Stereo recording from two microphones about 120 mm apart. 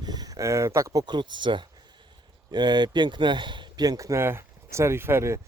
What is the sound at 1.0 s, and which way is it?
Speech, 40° right (ahead or behind).